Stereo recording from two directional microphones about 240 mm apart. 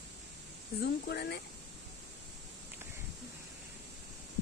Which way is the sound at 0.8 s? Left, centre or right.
Left.